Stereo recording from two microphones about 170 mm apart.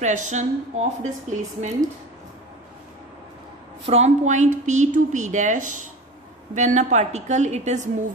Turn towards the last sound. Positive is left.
turn(degrees=-45)  # may be behind; listen again after turning